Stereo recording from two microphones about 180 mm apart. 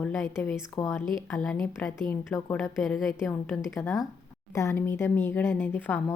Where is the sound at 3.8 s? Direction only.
10° left (ahead or behind).